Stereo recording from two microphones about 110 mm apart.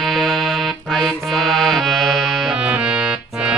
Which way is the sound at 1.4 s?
5° left (ahead or behind).